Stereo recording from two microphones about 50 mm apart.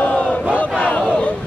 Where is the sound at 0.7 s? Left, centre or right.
Left.